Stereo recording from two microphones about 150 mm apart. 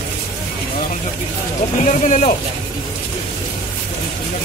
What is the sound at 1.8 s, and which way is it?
Speech, 55° left (ahead or behind).